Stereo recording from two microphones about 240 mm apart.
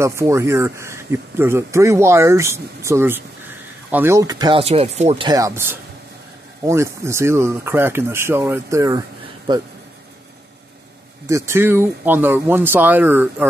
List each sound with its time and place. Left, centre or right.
0.0 s speech: centre; by 5.3 s right
5.3 s speech: centre
11.2 s speech: centre